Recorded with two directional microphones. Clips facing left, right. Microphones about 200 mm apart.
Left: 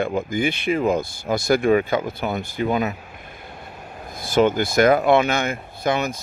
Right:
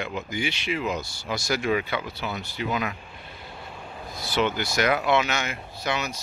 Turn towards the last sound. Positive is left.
turn(degrees=50)  # may be behind; listen again after turning